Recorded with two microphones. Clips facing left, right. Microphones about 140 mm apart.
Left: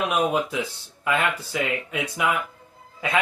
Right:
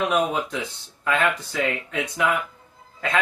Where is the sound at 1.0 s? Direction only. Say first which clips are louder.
Right 1 dB; 10° left (ahead or behind).